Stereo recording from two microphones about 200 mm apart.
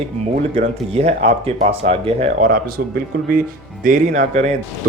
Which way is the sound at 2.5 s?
45° right (ahead or behind).